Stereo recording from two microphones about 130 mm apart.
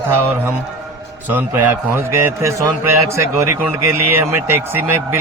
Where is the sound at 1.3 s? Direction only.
15° right (ahead or behind).